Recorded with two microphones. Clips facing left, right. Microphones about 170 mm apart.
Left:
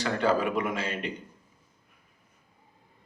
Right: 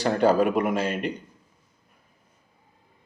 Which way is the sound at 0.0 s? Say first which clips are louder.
Right 5 dB; 40° right (ahead or behind).